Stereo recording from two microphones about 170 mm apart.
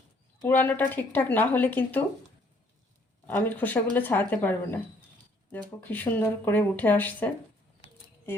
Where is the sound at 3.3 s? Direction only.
10° left (ahead or behind).